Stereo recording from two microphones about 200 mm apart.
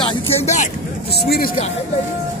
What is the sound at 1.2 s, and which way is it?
Speech, 50° left (ahead or behind).